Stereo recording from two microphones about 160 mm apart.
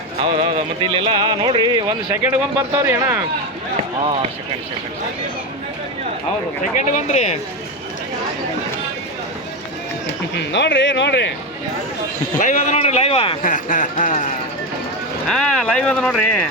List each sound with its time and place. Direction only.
0.9 s music: 35° right (ahead or behind)
2.2 s speech: 15° right (ahead or behind)
6.7 s speech: 50° left (ahead or behind)
10.3 s speech: 90° left
12.4 s a man's voice: 55° left (ahead or behind); by 13.4 s 35° left (ahead or behind)
13.4 s speech: 55° left (ahead or behind)
15.3 s speech: 5° left (ahead or behind)